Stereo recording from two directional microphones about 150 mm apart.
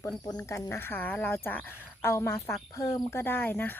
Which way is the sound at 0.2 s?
20° left (ahead or behind).